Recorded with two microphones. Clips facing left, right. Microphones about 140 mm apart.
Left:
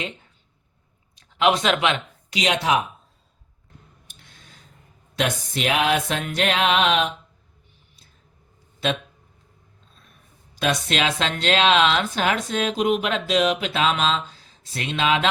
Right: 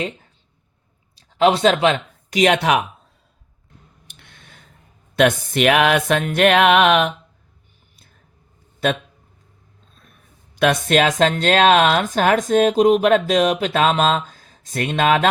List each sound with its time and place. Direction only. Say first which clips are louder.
1.1 s speech: right 4 dB; 35° right (ahead or behind)
2.3 s speech: right 5 dB; 55° right (ahead or behind)
4.1 s a sound: right 4 dB; 60° right (ahead or behind)
5.1 s speech: right 9 dB; 60° right (ahead or behind)
8.8 s speech: right 4 dB; 50° right (ahead or behind)
10.5 s speech: right 7 dB; 60° right (ahead or behind)